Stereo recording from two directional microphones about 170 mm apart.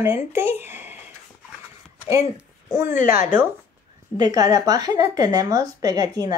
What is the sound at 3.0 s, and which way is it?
Speech, 50° left (ahead or behind).